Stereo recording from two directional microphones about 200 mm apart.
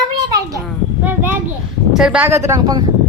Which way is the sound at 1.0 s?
10° right (ahead or behind).